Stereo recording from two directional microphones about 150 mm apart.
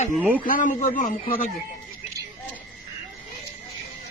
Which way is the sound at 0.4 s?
60° left (ahead or behind).